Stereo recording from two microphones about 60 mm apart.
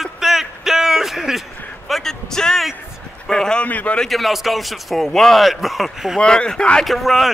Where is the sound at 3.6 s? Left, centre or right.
Left.